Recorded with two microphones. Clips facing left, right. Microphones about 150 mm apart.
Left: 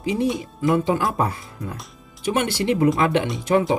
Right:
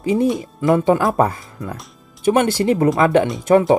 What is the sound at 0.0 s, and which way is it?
Speech, 45° right (ahead or behind).